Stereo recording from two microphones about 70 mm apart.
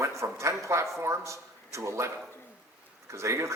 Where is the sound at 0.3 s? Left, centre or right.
Right.